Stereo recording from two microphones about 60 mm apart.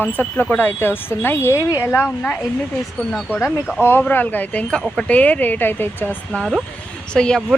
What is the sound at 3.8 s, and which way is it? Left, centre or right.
Speech, left.